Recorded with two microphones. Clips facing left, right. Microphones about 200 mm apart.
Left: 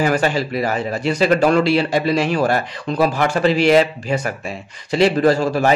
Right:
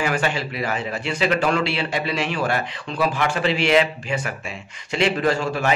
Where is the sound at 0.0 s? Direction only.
40° left (ahead or behind).